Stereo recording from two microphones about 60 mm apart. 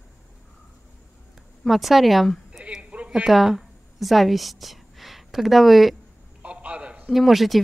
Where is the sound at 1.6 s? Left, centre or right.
Centre.